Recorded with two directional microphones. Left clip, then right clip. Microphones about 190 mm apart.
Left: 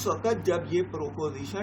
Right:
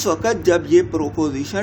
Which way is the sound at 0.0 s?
55° right (ahead or behind).